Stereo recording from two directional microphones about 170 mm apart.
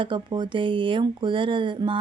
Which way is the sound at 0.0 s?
30° right (ahead or behind).